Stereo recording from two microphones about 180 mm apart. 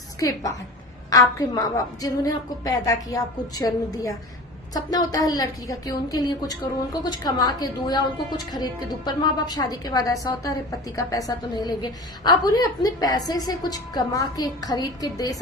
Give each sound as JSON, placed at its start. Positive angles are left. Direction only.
{"t": 0.2, "sound": "a woman's voice", "side_deg": 20}